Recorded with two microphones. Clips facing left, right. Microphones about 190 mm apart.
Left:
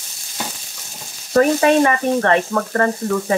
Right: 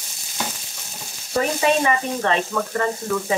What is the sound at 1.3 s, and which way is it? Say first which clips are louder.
Sizzle: left 6 dB; 55° left (ahead or behind).